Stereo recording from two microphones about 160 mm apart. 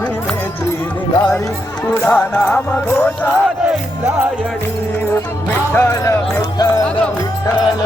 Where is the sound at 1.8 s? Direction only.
5° left (ahead or behind).